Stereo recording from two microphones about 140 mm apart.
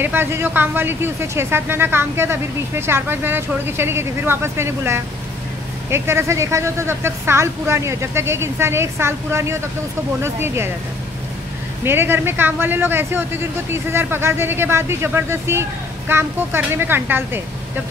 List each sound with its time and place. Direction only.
0.0 s speech: 15° right (ahead or behind)
11.8 s speech: 15° right (ahead or behind)